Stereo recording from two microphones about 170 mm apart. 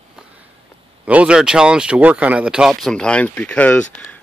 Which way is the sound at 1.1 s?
5° right (ahead or behind).